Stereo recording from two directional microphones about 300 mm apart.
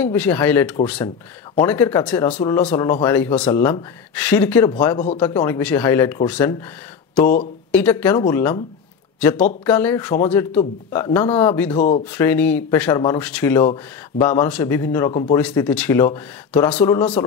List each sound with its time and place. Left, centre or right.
0.0 s speech: centre
7.7 s speech: centre